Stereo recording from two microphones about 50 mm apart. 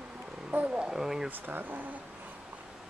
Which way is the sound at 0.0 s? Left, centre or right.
Centre.